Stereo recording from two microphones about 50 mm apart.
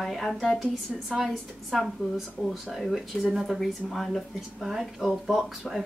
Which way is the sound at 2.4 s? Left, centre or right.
Centre.